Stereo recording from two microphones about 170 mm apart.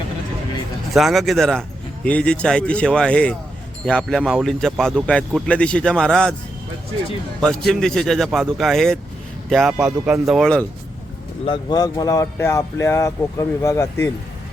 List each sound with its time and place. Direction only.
0.9 s speech: centre (ahead or behind)
7.4 s speech: centre (ahead or behind)
11.4 s speech: 25° left (ahead or behind)